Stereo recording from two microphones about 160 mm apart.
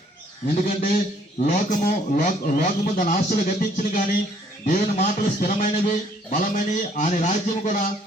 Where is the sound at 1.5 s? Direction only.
55° left (ahead or behind).